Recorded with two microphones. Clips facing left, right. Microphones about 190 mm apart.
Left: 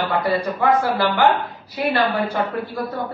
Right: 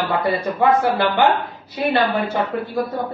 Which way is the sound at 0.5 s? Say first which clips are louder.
Right 4 dB; 25° right (ahead or behind).